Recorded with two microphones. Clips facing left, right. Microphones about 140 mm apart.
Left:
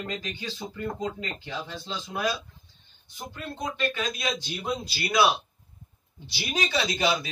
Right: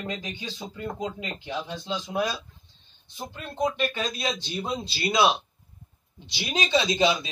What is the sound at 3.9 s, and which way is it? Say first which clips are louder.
Speech: right 1 dB; 30° right (ahead or behind).